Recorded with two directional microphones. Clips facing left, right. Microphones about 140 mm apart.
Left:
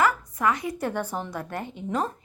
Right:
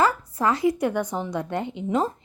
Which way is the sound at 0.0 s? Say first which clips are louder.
Right 1 dB; 30° right (ahead or behind).